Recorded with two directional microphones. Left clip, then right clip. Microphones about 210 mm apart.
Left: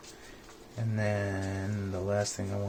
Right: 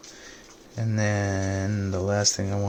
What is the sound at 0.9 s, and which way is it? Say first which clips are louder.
Speech: right 5 dB; 55° right (ahead or behind).